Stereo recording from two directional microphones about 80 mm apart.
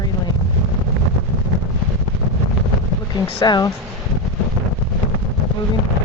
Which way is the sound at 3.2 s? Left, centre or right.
Left.